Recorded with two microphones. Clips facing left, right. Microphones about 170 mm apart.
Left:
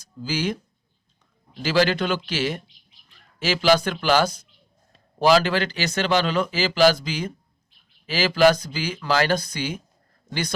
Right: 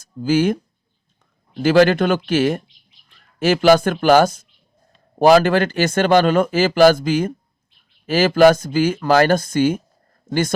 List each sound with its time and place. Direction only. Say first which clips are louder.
0.0 s speech: right 10 dB; 50° right (ahead or behind)
1.6 s speech: right 7 dB; 50° right (ahead or behind)